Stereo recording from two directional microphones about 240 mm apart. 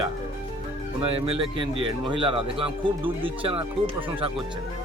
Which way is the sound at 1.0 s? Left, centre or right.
Right.